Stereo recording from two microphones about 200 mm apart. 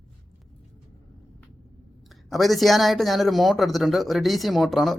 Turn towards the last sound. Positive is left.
turn(degrees=0)  # may be behind; listen again after turning